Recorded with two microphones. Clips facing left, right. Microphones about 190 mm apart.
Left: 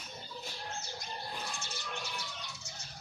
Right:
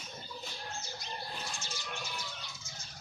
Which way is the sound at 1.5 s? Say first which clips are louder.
Left 1 dB; 60° left (ahead or behind).